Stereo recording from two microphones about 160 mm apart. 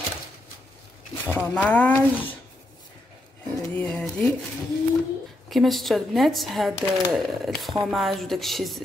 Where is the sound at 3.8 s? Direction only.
5° left (ahead or behind).